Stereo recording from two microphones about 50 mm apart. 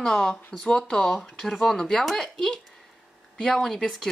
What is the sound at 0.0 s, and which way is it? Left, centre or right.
Speech, centre.